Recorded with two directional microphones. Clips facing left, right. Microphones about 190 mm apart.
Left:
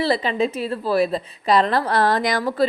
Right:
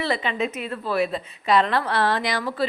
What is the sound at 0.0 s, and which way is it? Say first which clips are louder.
A woman's voice: left 5 dB; 35° left (ahead or behind).